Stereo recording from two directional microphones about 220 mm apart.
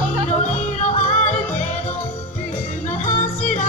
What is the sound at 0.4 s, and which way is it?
Music, 30° left (ahead or behind).